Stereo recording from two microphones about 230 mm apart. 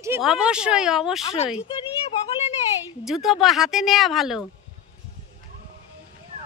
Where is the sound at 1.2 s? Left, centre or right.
Left.